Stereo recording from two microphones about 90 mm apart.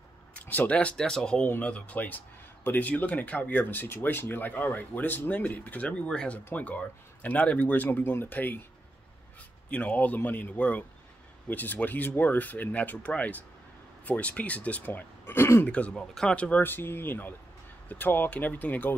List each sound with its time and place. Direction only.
0.4 s a man's voice: 15° left (ahead or behind)
9.7 s a man's voice: 15° left (ahead or behind)
15.7 s speech: 10° left (ahead or behind)